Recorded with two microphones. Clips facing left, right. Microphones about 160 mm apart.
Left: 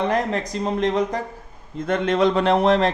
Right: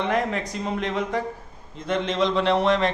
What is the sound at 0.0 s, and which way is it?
Speech, 35° left (ahead or behind).